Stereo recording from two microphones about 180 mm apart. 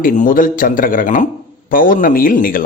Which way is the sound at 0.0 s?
50° left (ahead or behind).